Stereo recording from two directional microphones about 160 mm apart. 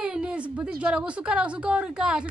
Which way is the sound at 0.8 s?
5° right (ahead or behind).